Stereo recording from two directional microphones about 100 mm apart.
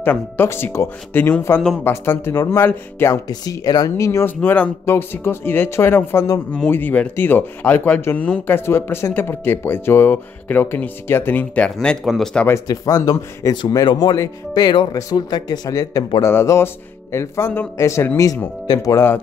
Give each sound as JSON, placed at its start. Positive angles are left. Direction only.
{"t": 0.0, "sound": "speech", "side_deg": 20}
{"t": 3.3, "sound": "speech", "side_deg": 40}
{"t": 3.9, "sound": "speech", "side_deg": 30}
{"t": 4.4, "sound": "speech", "side_deg": 15}
{"t": 12.6, "sound": "speech", "side_deg": 40}
{"t": 13.8, "sound": "speech", "side_deg": 45}
{"t": 16.3, "sound": "speech", "side_deg": 25}